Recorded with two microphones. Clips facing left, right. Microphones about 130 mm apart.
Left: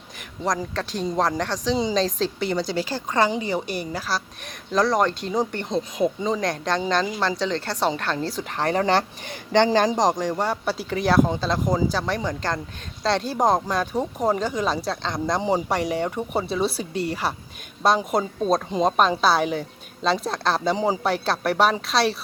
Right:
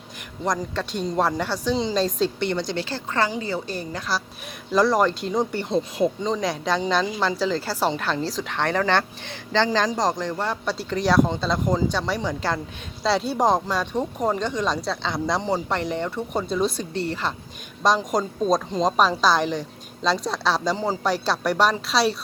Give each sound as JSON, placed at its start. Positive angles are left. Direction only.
{"t": 0.4, "sound": "a woman's voice", "side_deg": 0}
{"t": 4.7, "sound": "speech", "side_deg": 0}
{"t": 8.5, "sound": "speech", "side_deg": 35}
{"t": 9.9, "sound": "speech", "side_deg": 15}
{"t": 15.4, "sound": "a woman's voice", "side_deg": 10}
{"t": 20.7, "sound": "a woman's voice", "side_deg": 15}
{"t": 21.1, "sound": "speech", "side_deg": 0}